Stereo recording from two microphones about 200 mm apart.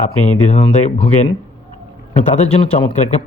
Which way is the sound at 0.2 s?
35° left (ahead or behind).